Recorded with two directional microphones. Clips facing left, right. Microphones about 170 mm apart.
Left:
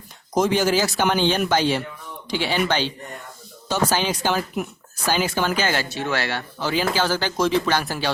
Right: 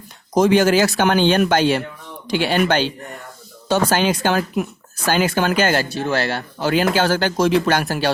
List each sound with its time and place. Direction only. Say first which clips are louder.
0.4 s speech: right 6 dB; 60° right (ahead or behind)
6.0 s speech: right 4 dB; 35° right (ahead or behind)
6.6 s speech: right 5 dB; 60° right (ahead or behind)